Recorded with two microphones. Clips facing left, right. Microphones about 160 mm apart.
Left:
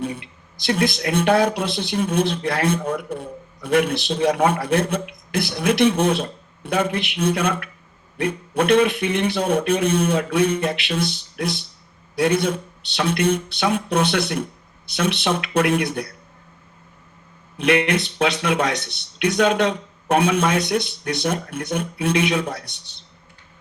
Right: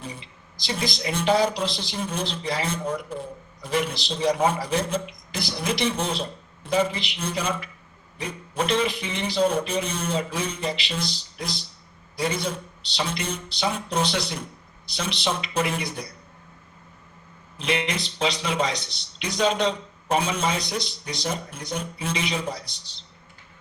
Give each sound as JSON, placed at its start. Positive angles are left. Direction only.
{"t": 0.0, "sound": "speech", "side_deg": 65}
{"t": 17.6, "sound": "speech", "side_deg": 65}